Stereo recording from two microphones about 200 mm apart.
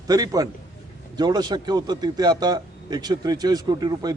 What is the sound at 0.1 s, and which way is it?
A man's voice, 20° right (ahead or behind).